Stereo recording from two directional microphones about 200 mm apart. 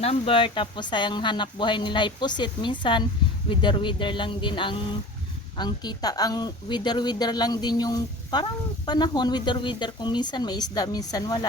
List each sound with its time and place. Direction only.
0.0 s speech: 30° left (ahead or behind)